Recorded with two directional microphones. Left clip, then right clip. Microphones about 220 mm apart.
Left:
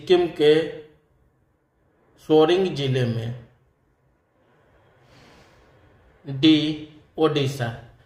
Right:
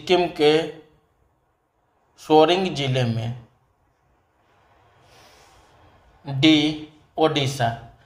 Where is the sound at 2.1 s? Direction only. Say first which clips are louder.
Right 1 dB; 20° right (ahead or behind).